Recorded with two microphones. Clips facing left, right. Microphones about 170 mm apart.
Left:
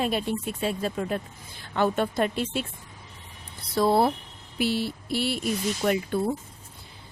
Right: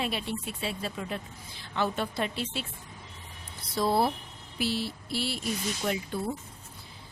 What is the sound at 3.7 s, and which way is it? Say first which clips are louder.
Speech: left 5 dB; 60° left (ahead or behind).